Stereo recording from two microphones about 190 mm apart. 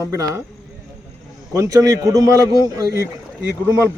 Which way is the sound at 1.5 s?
15° right (ahead or behind).